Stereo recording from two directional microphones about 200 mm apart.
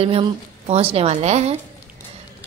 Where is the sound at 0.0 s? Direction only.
30° right (ahead or behind).